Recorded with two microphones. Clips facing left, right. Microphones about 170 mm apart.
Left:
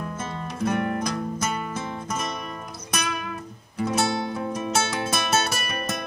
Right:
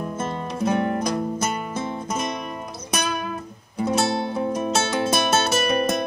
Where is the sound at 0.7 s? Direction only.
20° right (ahead or behind).